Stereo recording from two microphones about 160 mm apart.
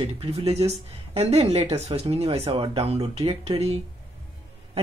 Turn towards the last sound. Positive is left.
turn(degrees=-40)  # may be behind; listen again after turning